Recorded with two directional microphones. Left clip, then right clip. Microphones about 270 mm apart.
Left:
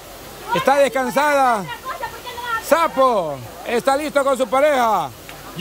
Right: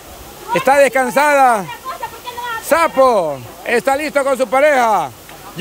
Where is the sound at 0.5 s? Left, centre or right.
Centre.